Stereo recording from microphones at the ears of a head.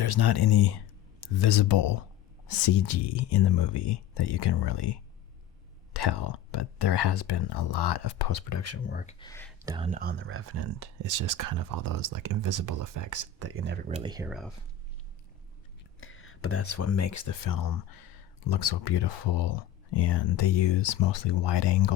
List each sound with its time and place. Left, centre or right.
0.0 s speech: left
9.9 s speech: right
16.0 s speech: left